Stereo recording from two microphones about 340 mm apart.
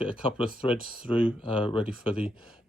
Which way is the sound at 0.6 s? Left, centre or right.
Centre.